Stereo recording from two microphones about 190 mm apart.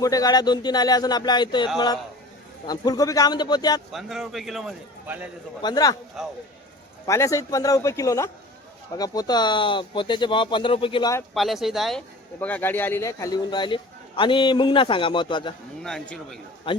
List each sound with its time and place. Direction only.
0.0 s speech: 20° left (ahead or behind)
3.9 s a man's voice: centre (ahead or behind)
5.6 s speech: 20° left (ahead or behind)
6.2 s a man's voice: centre (ahead or behind)
7.1 s a man's voice: 15° left (ahead or behind)
11.3 s speech: centre (ahead or behind); by 15.5 s 25° left (ahead or behind)
15.8 s a man's voice: 5° left (ahead or behind)
16.7 s speech: 25° left (ahead or behind)